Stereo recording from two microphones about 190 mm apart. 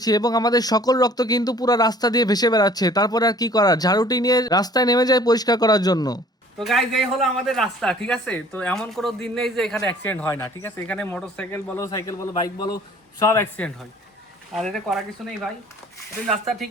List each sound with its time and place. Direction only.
0.0 s speech: 20° left (ahead or behind)
6.6 s a man's voice: centre (ahead or behind)
14.5 s a man's voice: centre (ahead or behind)
16.2 s a man's voice: centre (ahead or behind)